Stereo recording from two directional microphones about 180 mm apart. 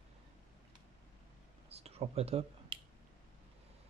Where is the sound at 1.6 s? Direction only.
35° right (ahead or behind).